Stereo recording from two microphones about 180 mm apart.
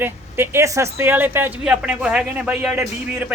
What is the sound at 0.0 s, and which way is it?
A man's voice, 10° right (ahead or behind).